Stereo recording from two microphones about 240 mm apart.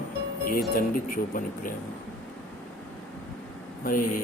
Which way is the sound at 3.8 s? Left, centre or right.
Left.